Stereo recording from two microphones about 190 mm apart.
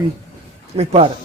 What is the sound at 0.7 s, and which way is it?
Speech, 35° right (ahead or behind).